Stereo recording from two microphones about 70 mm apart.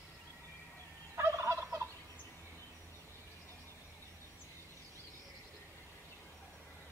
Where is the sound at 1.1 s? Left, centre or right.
Right.